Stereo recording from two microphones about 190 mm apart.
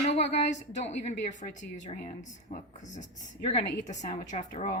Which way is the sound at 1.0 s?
40° left (ahead or behind).